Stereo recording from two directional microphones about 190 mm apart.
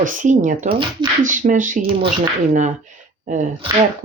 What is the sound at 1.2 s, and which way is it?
Speech, 40° right (ahead or behind).